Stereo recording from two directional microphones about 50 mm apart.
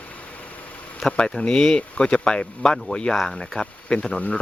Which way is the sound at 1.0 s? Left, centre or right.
Centre.